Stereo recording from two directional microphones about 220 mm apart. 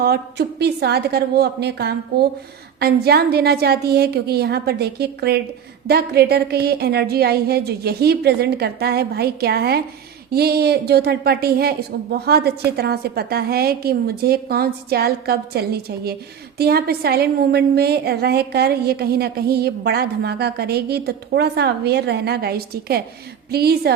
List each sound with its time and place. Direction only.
0.0 s a woman's voice: 45° right (ahead or behind)